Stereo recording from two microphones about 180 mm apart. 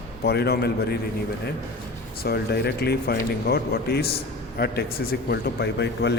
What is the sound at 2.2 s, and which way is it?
Speech, 60° left (ahead or behind).